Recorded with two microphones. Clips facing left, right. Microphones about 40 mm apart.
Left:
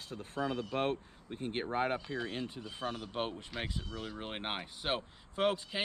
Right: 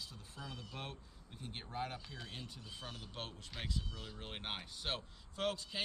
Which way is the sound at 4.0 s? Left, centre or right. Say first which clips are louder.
Left 8 dB; left.